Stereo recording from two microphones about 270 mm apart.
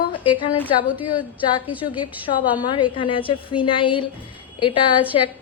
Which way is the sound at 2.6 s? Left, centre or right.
Centre.